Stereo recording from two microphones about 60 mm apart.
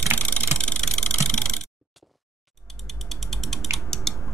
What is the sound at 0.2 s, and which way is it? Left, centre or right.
Vehicle, left.